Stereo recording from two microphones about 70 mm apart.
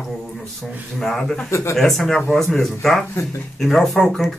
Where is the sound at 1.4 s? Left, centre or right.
Left.